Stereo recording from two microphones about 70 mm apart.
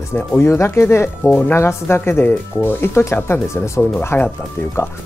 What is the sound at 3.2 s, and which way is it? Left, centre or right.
Speech, left.